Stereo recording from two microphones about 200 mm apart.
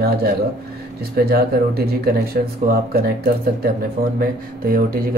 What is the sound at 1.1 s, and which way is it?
Speech, 50° right (ahead or behind).